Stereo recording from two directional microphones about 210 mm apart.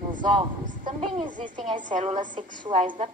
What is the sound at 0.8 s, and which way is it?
A child's voice, 30° right (ahead or behind).